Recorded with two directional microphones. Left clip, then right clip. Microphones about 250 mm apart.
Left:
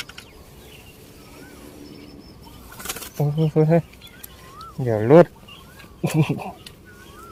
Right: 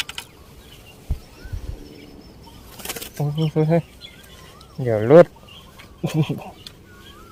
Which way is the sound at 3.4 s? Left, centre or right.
Centre.